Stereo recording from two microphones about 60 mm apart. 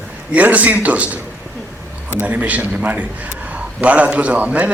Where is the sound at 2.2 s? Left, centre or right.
Right.